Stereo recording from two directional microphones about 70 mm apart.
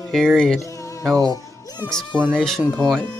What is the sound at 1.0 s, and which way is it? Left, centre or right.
Music, right.